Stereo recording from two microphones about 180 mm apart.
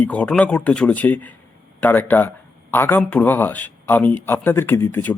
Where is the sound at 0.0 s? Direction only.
5° left (ahead or behind).